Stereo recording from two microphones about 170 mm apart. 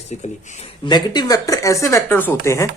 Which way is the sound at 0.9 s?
25° left (ahead or behind).